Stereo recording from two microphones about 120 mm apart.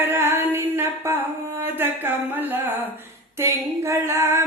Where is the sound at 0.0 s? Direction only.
20° right (ahead or behind).